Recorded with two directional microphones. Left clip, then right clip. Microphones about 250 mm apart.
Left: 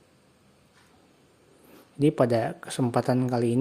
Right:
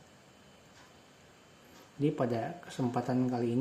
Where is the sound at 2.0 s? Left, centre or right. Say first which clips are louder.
Left 9 dB; left.